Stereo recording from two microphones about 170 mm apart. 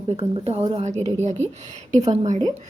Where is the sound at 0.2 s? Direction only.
35° right (ahead or behind).